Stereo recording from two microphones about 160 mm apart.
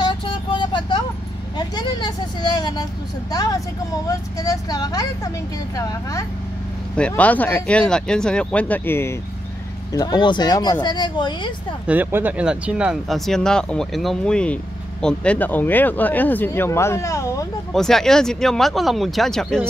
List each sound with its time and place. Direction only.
0.0 s vehicle: 30° left (ahead or behind)
1.8 s speech: 25° left (ahead or behind)
7.0 s speech: 10° left (ahead or behind)
9.9 s speech: 25° left (ahead or behind)
11.9 s speech: 10° right (ahead or behind); by 17.5 s 20° left (ahead or behind)
17.7 s speech: 5° left (ahead or behind)